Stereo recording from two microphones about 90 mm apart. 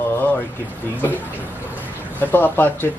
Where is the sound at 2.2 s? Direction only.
20° left (ahead or behind).